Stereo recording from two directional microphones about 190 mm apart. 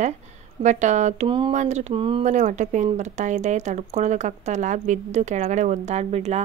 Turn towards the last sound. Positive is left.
turn(degrees=-35)  # may be behind; listen again after turning